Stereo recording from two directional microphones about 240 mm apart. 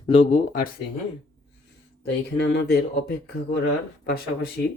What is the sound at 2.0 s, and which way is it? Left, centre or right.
Speech, left.